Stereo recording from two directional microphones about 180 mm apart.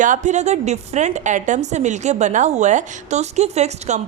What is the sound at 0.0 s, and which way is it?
A woman's voice, 45° right (ahead or behind).